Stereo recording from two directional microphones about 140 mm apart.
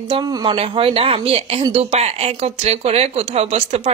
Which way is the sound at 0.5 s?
40° right (ahead or behind).